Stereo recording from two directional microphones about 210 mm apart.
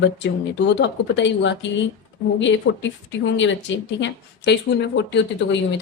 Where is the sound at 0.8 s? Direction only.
60° left (ahead or behind).